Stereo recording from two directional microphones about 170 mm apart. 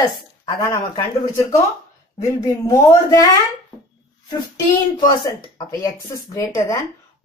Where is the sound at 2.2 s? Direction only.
20° left (ahead or behind).